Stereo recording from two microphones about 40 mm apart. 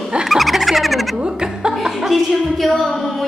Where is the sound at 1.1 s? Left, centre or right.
Centre.